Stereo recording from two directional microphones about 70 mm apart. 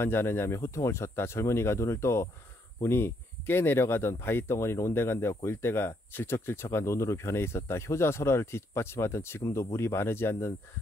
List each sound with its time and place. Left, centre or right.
0.0 s speech: left
0.6 s speech: left